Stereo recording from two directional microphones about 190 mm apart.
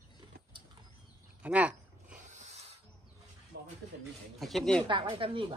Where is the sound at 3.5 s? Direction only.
65° right (ahead or behind).